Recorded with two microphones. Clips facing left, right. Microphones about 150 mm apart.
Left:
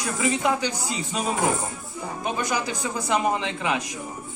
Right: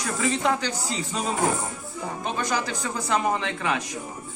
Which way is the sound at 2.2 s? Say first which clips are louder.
Left 1 dB; 10° left (ahead or behind).